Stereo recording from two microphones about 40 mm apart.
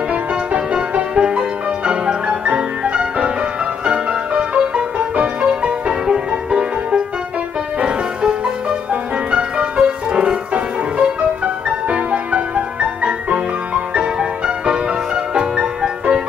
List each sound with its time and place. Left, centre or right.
0.1 s music: right